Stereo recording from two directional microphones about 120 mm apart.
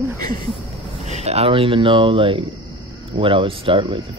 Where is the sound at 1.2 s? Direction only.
60° right (ahead or behind).